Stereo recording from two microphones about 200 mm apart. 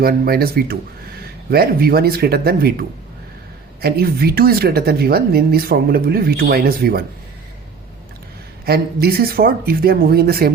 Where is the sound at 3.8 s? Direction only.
50° right (ahead or behind).